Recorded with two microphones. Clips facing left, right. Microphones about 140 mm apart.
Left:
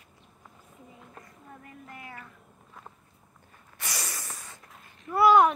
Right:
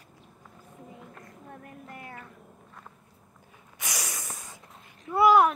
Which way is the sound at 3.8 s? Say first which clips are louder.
Right 1 dB; 15° right (ahead or behind).